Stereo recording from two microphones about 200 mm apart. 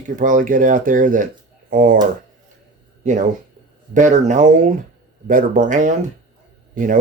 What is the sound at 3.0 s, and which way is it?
Speech, 40° right (ahead or behind).